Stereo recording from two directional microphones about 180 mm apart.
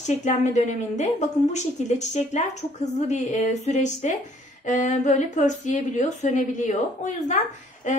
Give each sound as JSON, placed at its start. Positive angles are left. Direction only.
{"t": 0.0, "sound": "a woman's voice", "side_deg": 40}